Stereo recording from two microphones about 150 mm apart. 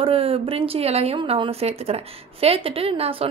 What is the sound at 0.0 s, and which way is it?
A woman's voice, 40° right (ahead or behind).